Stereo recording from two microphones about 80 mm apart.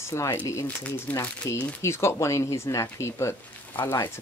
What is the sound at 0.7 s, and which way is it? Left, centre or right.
Speech, left.